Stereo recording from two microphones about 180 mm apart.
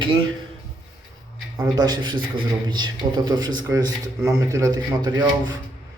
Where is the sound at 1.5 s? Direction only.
20° right (ahead or behind).